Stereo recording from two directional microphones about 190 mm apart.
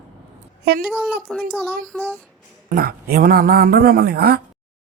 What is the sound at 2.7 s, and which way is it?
A woman's voice, 50° right (ahead or behind).